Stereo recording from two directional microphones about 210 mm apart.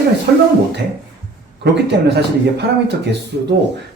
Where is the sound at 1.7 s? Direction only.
55° right (ahead or behind).